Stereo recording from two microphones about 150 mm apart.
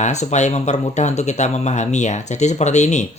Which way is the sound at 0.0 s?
50° left (ahead or behind).